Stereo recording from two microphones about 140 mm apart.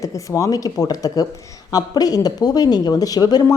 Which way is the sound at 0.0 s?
25° left (ahead or behind).